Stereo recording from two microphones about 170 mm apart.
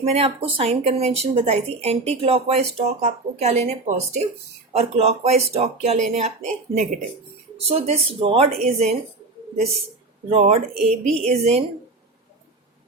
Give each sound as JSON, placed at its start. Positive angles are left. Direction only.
{"t": 0.0, "sound": "speech", "side_deg": -35}
{"t": 7.7, "sound": "speech", "side_deg": -35}
{"t": 10.2, "sound": "speech", "side_deg": -40}